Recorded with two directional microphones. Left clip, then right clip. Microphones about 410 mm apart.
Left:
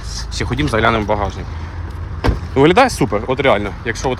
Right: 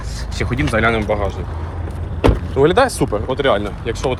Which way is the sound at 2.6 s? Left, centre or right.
Centre.